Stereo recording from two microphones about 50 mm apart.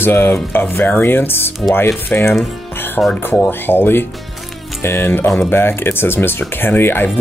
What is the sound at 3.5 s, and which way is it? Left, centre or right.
Speech, left.